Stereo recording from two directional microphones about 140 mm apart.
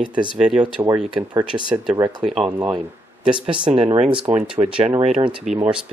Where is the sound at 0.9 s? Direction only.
25° right (ahead or behind).